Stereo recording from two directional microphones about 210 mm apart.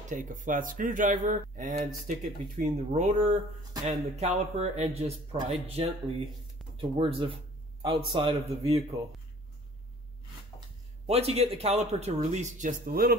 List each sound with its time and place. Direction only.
0.1 s a man's voice: 35° right (ahead or behind)
11.1 s speech: 30° right (ahead or behind)